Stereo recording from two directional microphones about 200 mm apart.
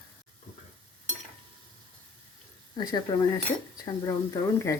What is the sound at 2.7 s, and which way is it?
Speech, 20° left (ahead or behind).